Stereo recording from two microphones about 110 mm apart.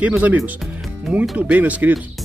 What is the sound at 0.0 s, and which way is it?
Speech, 15° right (ahead or behind).